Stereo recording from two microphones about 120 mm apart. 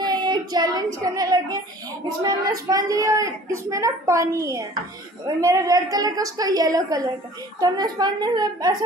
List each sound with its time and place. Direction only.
0.0 s child singing: 35° right (ahead or behind)
2.0 s a woman's voice: 35° right (ahead or behind)